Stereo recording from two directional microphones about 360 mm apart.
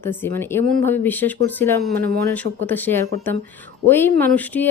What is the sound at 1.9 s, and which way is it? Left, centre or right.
Speech, right.